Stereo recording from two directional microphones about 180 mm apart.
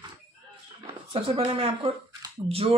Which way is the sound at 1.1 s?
30° right (ahead or behind).